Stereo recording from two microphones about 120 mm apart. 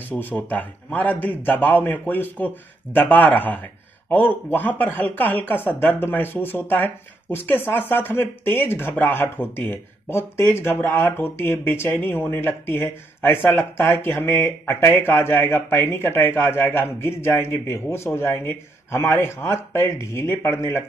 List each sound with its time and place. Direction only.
0.1 s a man's voice: 10° left (ahead or behind)